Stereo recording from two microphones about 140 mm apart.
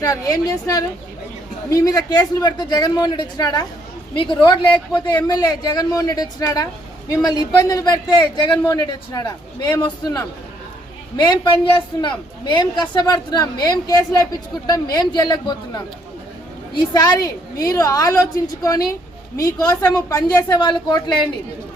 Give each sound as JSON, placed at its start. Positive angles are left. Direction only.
{"t": 0.0, "sound": "a man's voice", "side_deg": 25}